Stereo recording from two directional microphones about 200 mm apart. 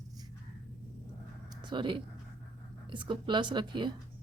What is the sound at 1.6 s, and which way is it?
Speech, 25° right (ahead or behind).